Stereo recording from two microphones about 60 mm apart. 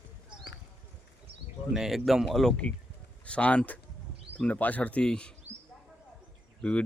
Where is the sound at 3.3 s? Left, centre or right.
Left.